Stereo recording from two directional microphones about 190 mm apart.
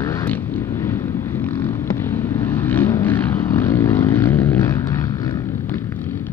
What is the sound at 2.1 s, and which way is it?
Vehicle, 10° left (ahead or behind).